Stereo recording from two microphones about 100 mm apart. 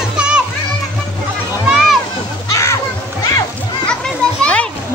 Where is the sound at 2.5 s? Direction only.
30° left (ahead or behind).